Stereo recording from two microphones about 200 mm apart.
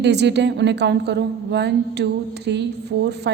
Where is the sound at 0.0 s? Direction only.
60° right (ahead or behind).